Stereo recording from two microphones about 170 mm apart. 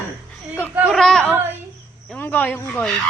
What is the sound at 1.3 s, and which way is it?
Speech, 15° right (ahead or behind).